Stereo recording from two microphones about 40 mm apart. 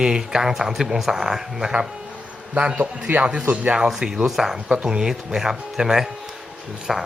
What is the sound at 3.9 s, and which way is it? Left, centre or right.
Speech, centre.